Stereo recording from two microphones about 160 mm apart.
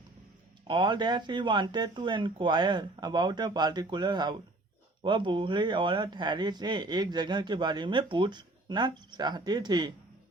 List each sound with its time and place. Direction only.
0.7 s speech: 30° right (ahead or behind)